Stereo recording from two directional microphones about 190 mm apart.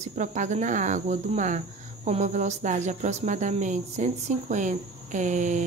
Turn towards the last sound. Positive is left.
turn(degrees=-40)  # may be behind; listen again after turning